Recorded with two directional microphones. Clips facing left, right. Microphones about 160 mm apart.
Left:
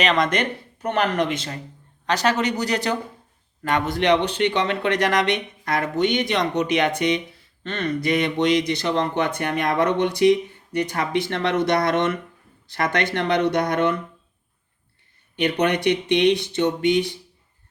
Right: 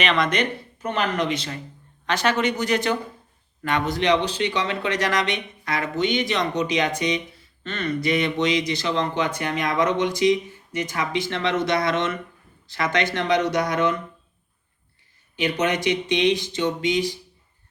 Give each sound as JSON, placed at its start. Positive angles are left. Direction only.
{"t": 0.0, "sound": "speech", "side_deg": 45}
{"t": 15.4, "sound": "speech", "side_deg": 60}